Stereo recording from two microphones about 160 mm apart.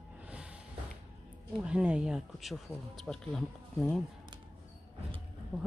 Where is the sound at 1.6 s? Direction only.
5° right (ahead or behind).